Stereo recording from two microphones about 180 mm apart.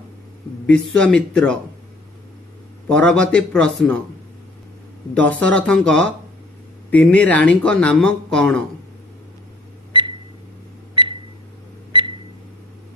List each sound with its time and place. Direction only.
0.7 s a man's voice: 5° left (ahead or behind)
2.9 s a man's voice: 5° left (ahead or behind)
5.1 s speech: 5° left (ahead or behind)
11.9 s a sound: 30° right (ahead or behind)